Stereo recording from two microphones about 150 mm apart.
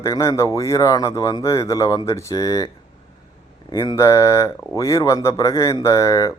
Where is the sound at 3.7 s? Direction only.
25° left (ahead or behind).